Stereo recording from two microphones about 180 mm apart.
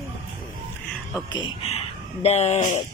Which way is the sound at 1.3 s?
25° left (ahead or behind).